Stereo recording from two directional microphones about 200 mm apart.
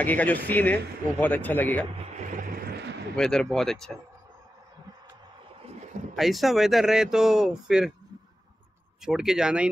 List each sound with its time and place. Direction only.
0.0 s speech: 10° left (ahead or behind)
2.1 s music: 45° right (ahead or behind)
3.2 s speech: 5° left (ahead or behind)
6.1 s speech: centre (ahead or behind)
9.0 s speech: 5° right (ahead or behind)